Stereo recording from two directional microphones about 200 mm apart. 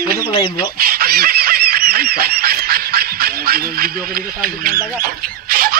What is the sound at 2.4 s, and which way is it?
Speech, 50° right (ahead or behind).